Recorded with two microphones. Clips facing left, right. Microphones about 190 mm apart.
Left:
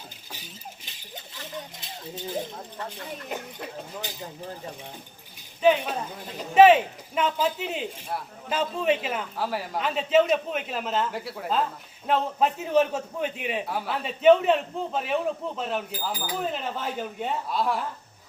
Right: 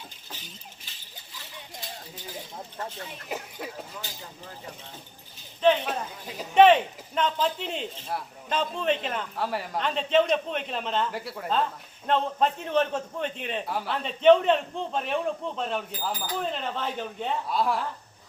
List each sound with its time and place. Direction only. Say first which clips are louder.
2.1 s speech: left 12 dB; 25° left (ahead or behind)
3.2 s a man's voice: right 2 dB; 5° right (ahead or behind)
4.0 s speech: left 5 dB; 15° left (ahead or behind)
5.6 s a man's voice: left 1 dB; 5° left (ahead or behind)